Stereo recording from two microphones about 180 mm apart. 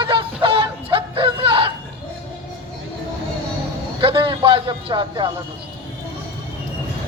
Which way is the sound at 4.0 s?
30° right (ahead or behind).